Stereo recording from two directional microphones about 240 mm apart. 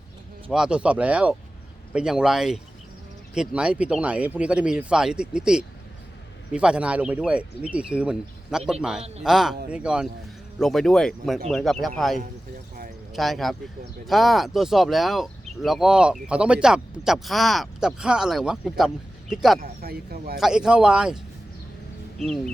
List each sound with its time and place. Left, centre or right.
0.5 s speech: centre
19.5 s speech: right
20.4 s speech: centre
22.2 s speech: centre